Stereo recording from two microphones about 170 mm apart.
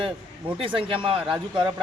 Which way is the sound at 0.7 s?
30° right (ahead or behind).